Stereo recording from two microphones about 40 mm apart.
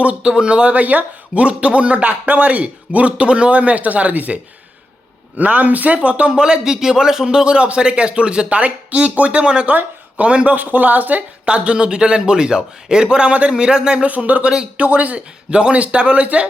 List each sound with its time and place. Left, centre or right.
0.2 s speech: right
0.8 s speech: right
1.4 s a man's voice: right
5.4 s speech: right
9.6 s speech: right
11.4 s speech: right
14.3 s a man's voice: right
15.4 s a man's voice: right